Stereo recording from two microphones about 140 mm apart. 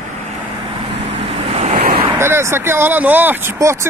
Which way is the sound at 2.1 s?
15° right (ahead or behind).